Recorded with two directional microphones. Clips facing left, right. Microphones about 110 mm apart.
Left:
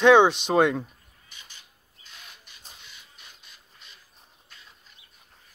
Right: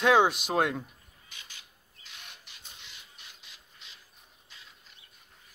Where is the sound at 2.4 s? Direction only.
40° left (ahead or behind).